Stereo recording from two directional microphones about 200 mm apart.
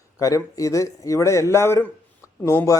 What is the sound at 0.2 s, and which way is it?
A man's voice, 15° left (ahead or behind).